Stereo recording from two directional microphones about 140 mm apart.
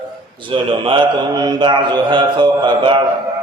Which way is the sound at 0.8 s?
35° right (ahead or behind).